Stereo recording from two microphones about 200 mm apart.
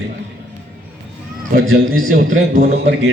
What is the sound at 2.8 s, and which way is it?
Speech, 65° right (ahead or behind).